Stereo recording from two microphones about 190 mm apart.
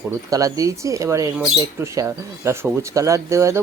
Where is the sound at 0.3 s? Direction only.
15° right (ahead or behind).